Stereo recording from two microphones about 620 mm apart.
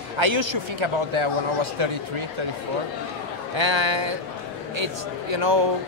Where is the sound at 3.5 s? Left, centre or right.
Right.